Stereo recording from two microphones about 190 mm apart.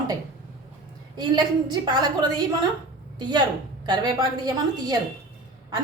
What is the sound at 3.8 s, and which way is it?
A woman's voice, 20° right (ahead or behind).